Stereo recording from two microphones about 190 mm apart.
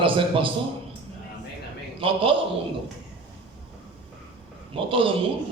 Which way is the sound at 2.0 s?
30° right (ahead or behind).